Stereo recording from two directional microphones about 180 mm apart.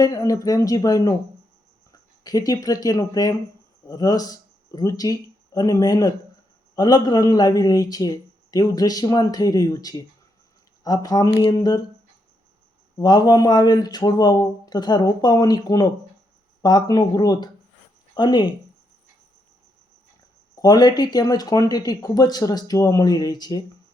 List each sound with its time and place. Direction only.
0.0 s speech: 20° left (ahead or behind)
11.3 s a sound: 30° left (ahead or behind)
11.5 s speech: 20° left (ahead or behind)
13.0 s speech: 20° left (ahead or behind)
20.6 s speech: 20° left (ahead or behind)